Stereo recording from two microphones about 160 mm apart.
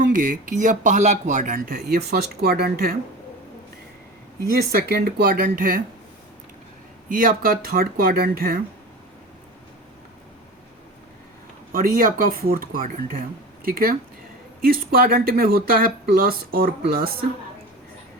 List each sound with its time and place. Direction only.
0.0 s speech: 55° right (ahead or behind); by 2.9 s 70° right (ahead or behind)
4.7 s speech: 70° right (ahead or behind)
7.1 s speech: 60° right (ahead or behind)
11.7 s speech: 60° right (ahead or behind)